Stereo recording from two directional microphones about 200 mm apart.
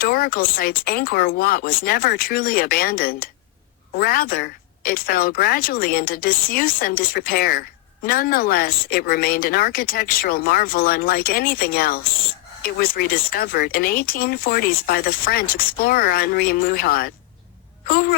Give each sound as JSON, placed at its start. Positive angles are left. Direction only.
{"t": 0.0, "sound": "speech", "side_deg": 45}